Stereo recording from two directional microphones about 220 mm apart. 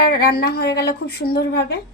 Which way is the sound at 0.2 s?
45° left (ahead or behind).